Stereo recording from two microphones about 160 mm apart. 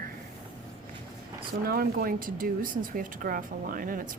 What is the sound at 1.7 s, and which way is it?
Speech, 70° right (ahead or behind).